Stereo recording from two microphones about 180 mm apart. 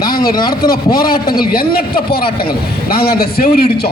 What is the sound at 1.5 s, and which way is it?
A man's voice, 55° left (ahead or behind).